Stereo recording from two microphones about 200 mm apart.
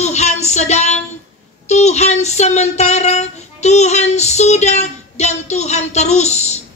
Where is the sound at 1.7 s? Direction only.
35° left (ahead or behind).